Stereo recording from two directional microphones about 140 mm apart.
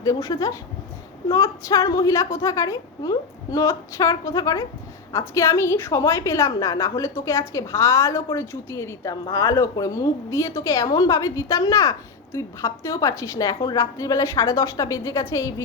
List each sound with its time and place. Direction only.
0.0 s a woman's voice: 25° left (ahead or behind)